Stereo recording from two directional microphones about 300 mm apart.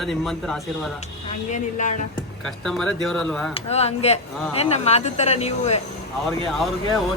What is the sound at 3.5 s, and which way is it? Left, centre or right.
Speech, left.